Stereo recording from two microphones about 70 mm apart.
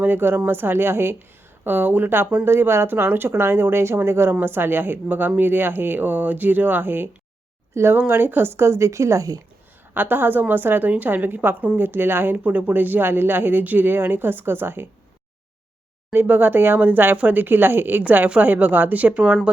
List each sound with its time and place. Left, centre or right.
0.0 s speech: right
9.9 s speech: right
12.4 s speech: right
16.1 s speech: right